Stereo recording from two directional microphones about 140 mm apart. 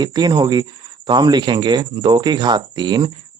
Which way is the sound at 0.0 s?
30° right (ahead or behind).